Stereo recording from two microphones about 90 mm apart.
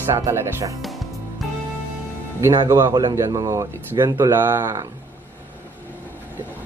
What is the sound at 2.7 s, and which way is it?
Speech, 30° right (ahead or behind).